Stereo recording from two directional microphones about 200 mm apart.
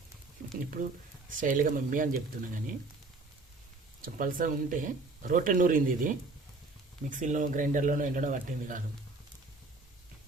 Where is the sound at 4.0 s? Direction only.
45° right (ahead or behind).